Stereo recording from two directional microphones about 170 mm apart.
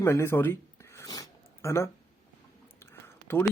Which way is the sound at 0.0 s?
15° left (ahead or behind).